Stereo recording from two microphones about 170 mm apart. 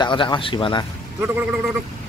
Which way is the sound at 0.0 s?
25° left (ahead or behind).